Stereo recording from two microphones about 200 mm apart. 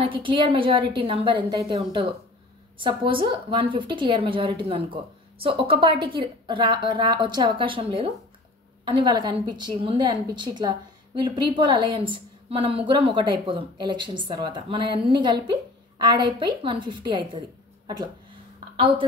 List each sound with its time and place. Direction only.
0.1 s a woman's voice: 25° right (ahead or behind)